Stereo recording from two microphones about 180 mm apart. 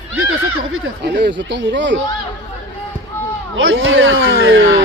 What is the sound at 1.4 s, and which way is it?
Speech, 85° right.